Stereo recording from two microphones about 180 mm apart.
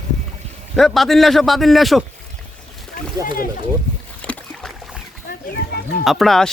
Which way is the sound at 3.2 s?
50° left (ahead or behind).